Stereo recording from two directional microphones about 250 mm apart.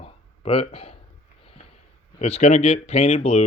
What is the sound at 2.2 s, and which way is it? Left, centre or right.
Speech, left.